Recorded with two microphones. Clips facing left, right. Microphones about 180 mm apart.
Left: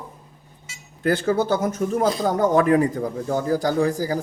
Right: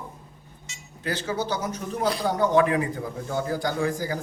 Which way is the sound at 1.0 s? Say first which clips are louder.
Left 8 dB; 50° left (ahead or behind).